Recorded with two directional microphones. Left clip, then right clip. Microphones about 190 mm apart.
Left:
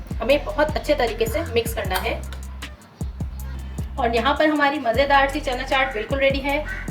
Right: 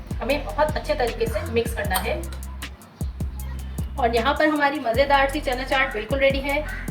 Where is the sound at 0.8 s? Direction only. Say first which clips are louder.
Left 3 dB; 45° left (ahead or behind).